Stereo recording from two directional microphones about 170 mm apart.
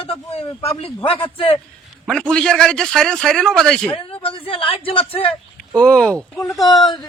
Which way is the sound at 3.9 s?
30° left (ahead or behind).